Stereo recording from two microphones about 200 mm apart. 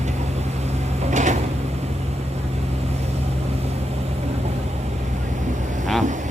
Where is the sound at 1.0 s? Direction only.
35° right (ahead or behind).